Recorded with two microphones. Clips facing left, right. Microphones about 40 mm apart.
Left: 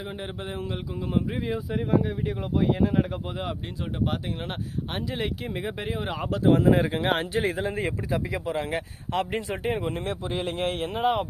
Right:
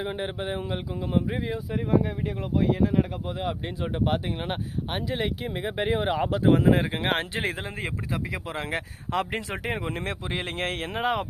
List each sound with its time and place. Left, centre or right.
0.0 s speech: right
0.6 s speech: centre
1.5 s speech: centre
4.0 s speech: right
4.9 s speech: centre
5.7 s speech: right
6.4 s speech: right
8.4 s speech: right
9.3 s speech: right
10.3 s speech: right